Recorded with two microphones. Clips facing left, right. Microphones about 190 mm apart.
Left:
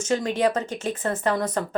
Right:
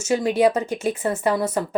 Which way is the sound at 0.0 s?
10° right (ahead or behind).